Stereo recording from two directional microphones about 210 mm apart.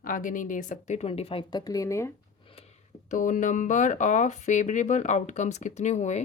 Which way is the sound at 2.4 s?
30° left (ahead or behind).